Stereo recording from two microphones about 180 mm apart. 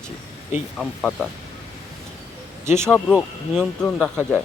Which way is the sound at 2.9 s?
Centre (ahead or behind).